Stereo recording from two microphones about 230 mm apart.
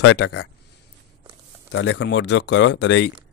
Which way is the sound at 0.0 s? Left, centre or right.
Left.